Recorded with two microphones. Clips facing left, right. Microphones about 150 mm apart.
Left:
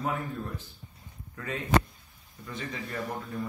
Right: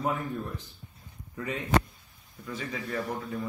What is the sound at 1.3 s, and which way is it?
Speech, 15° right (ahead or behind).